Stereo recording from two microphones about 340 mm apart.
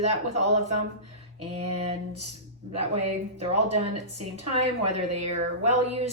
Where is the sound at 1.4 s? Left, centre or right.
Centre.